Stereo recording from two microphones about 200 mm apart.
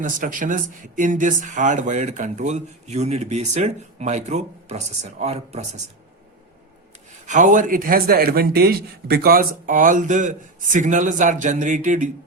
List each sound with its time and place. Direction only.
0.0 s speech: 40° right (ahead or behind)
7.3 s speech: 40° right (ahead or behind)